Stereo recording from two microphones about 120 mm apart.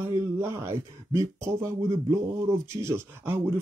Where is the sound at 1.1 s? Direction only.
25° right (ahead or behind).